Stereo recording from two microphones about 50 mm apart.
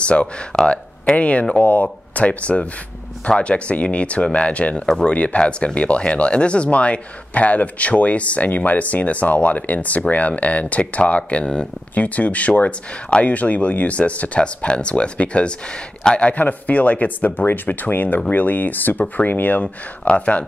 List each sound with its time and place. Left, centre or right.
0.0 s speech: left
4.8 s speech: centre
5.1 s speech: left